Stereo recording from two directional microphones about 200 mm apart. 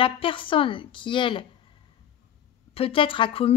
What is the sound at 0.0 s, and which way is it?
Speech, 25° left (ahead or behind).